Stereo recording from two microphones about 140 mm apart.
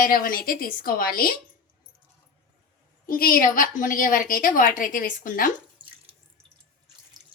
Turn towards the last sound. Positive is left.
turn(degrees=70)  # may be behind; listen again after turning